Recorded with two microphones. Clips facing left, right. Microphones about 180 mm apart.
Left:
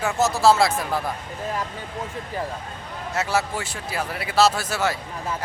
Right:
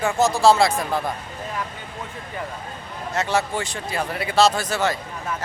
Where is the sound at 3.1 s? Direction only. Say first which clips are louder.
Right 2 dB; 5° left (ahead or behind).